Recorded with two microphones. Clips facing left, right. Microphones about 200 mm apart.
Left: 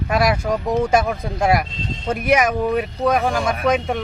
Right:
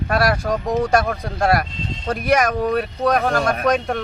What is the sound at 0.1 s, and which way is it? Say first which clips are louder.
Speech: left 1 dB; 15° left (ahead or behind).